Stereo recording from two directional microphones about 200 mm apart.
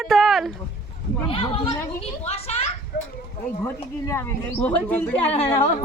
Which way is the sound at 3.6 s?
15° left (ahead or behind).